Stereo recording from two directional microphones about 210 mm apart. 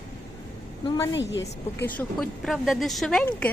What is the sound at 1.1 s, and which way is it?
Speech, 60° left (ahead or behind).